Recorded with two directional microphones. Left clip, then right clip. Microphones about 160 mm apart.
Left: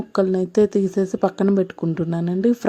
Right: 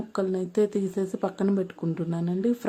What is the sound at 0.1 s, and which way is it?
Speech, 40° left (ahead or behind).